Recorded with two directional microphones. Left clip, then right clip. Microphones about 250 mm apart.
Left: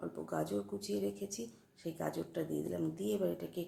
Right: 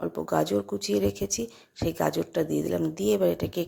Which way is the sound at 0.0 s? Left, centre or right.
Right.